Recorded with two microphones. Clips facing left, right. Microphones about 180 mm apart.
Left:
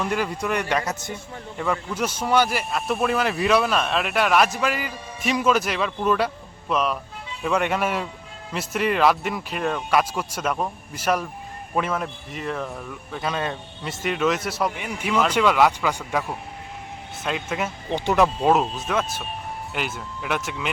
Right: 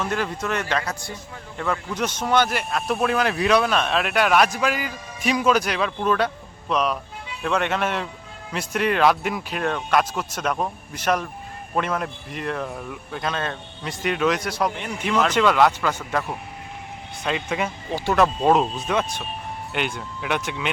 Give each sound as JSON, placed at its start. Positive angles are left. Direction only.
{"t": 0.0, "sound": "a man's voice", "side_deg": 10}
{"t": 1.5, "sound": "a man's voice", "side_deg": 10}
{"t": 17.2, "sound": "a man's voice", "side_deg": 0}
{"t": 17.9, "sound": "speech", "side_deg": 15}
{"t": 18.4, "sound": "a man's voice", "side_deg": 5}